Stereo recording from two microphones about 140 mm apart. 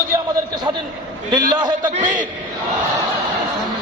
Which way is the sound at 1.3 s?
30° right (ahead or behind).